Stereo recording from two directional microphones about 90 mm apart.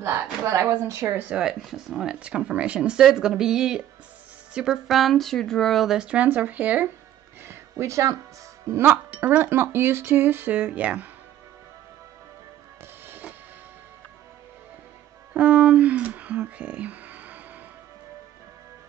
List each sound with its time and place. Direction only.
0.0 s a woman's voice: 30° right (ahead or behind)
1.3 s speech: 5° right (ahead or behind)
7.4 s music: 30° right (ahead or behind)
8.6 s speech: 30° right (ahead or behind)
8.9 s speech: 15° right (ahead or behind)
13.0 s train: 20° right (ahead or behind)
15.3 s a sound: 15° right (ahead or behind)